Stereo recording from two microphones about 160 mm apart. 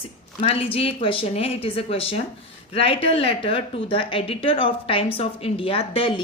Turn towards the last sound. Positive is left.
turn(degrees=30)  # may be behind; listen again after turning